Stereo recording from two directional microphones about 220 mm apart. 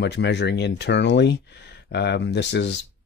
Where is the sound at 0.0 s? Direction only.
50° left (ahead or behind).